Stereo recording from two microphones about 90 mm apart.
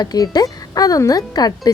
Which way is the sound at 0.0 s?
45° left (ahead or behind).